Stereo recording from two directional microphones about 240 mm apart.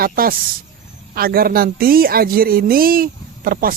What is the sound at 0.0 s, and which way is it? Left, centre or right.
Speech, right.